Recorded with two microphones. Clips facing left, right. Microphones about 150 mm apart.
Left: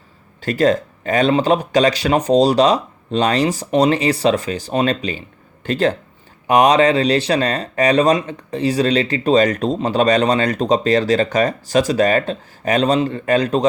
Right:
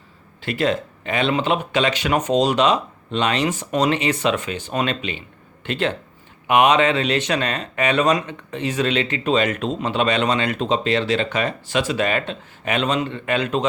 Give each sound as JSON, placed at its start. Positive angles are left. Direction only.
{"t": 0.4, "sound": "speech", "side_deg": 40}